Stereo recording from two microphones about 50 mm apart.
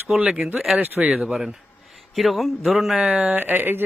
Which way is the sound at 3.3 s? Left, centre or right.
Right.